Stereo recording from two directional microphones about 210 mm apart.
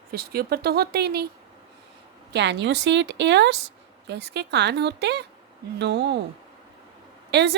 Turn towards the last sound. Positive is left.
turn(degrees=-55)  # may be behind; listen again after turning